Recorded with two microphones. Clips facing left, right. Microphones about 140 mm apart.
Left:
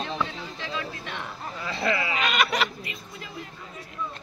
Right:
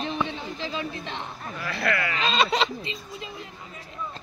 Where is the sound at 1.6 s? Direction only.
20° left (ahead or behind).